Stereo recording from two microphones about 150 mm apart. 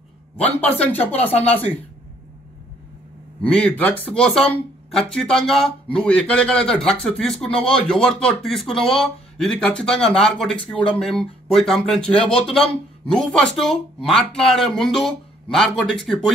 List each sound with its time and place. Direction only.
0.6 s speech: 10° left (ahead or behind)
3.4 s speech: 10° left (ahead or behind)
7.4 s speech: 40° left (ahead or behind)
7.8 s speech: 5° left (ahead or behind)